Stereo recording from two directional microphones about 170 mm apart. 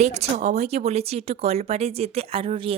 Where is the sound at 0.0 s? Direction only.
40° right (ahead or behind).